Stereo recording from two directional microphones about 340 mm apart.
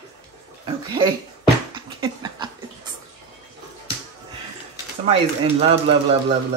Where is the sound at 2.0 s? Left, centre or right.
Centre.